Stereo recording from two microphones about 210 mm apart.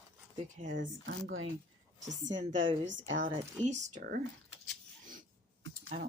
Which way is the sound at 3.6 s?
35° right (ahead or behind).